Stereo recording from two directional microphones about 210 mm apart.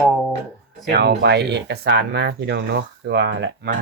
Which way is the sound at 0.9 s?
55° right (ahead or behind).